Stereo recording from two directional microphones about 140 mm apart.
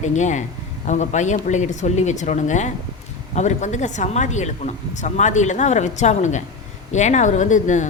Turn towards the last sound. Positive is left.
turn(degrees=60)  # may be behind; listen again after turning